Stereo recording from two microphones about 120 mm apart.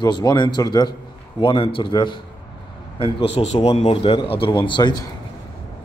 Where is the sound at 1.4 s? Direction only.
45° left (ahead or behind).